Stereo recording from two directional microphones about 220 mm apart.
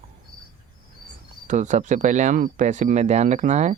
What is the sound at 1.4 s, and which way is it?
Cricket, 35° right (ahead or behind).